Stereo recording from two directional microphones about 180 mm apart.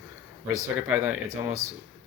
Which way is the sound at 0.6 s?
10° right (ahead or behind).